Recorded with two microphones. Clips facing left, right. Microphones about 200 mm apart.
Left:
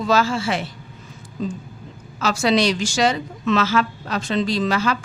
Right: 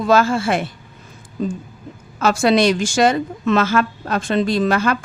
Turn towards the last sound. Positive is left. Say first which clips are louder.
# right 3 dB
turn(degrees=-55)  # may be behind; listen again after turning